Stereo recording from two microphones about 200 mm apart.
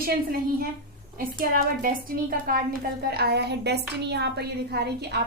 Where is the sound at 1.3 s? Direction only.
45° right (ahead or behind).